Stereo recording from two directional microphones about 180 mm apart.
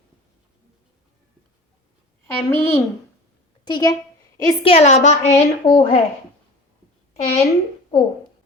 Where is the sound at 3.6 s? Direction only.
25° left (ahead or behind).